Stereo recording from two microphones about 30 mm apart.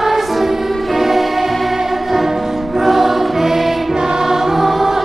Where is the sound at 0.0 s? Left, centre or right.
Centre.